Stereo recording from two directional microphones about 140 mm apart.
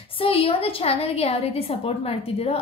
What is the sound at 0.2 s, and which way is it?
A woman's voice, 40° left (ahead or behind).